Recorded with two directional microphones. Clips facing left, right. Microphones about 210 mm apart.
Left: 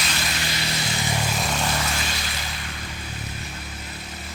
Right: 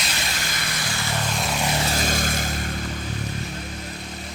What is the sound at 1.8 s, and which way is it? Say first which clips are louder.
Vehicle: right 5 dB; 40° right (ahead or behind).